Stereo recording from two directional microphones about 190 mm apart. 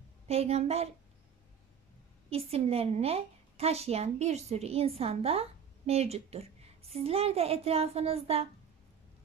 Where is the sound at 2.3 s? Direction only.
30° right (ahead or behind).